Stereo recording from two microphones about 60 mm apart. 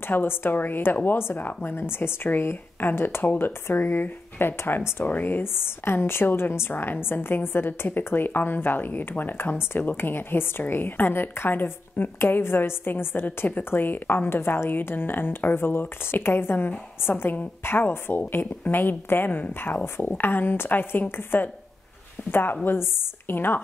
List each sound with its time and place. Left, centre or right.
0.1 s a woman's voice: left